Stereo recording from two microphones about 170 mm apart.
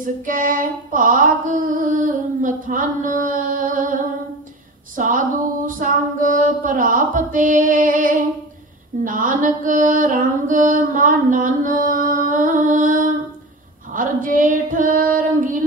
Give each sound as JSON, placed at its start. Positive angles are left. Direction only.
{"t": 0.0, "sound": "female singing", "side_deg": -50}
{"t": 9.0, "sound": "mantra", "side_deg": -50}
{"t": 13.9, "sound": "female singing", "side_deg": -50}